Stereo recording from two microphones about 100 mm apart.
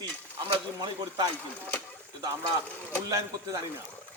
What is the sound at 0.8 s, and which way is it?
Speech, 45° right (ahead or behind).